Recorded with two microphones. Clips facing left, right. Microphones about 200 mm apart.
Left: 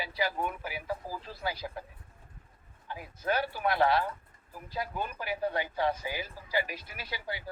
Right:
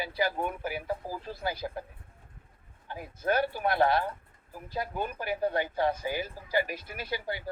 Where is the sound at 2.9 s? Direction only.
50° right (ahead or behind).